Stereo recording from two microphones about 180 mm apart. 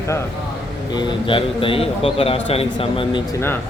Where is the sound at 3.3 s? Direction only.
15° left (ahead or behind).